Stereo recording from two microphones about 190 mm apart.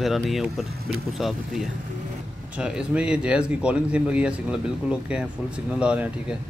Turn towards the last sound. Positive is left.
turn(degrees=-5)  # may be behind; listen again after turning